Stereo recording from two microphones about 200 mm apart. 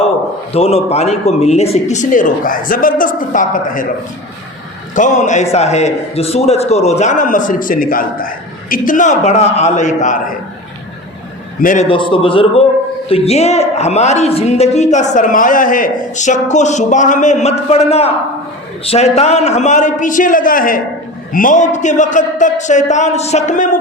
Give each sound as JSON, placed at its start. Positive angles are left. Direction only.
{"t": 0.5, "sound": "a woman's voice", "side_deg": 30}
{"t": 4.9, "sound": "a woman's voice", "side_deg": 40}
{"t": 11.6, "sound": "a man's voice", "side_deg": 40}
{"t": 11.9, "sound": "a man's voice", "side_deg": 25}